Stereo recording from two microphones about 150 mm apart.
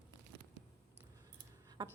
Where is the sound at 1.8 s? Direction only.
30° right (ahead or behind).